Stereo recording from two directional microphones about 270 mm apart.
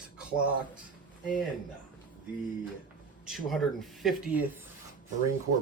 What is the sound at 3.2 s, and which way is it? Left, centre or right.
Speech, centre.